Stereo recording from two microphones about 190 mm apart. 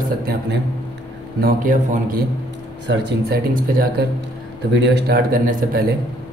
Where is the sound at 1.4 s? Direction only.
45° right (ahead or behind).